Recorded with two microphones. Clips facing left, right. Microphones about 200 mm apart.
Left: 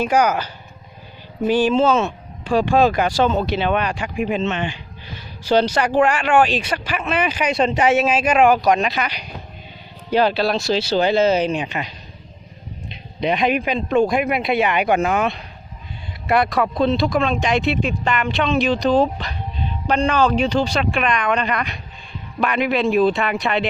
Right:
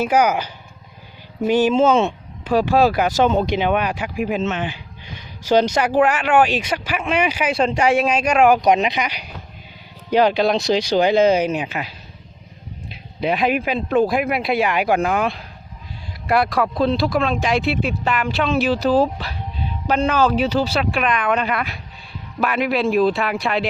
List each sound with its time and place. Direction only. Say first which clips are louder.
0.0 s speech: even; 10° right (ahead or behind)
8.6 s speech: right 1 dB; 20° right (ahead or behind); by 23.6 s centre (ahead or behind)